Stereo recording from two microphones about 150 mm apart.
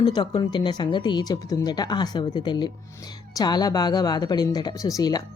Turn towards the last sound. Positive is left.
turn(degrees=25)  # may be behind; listen again after turning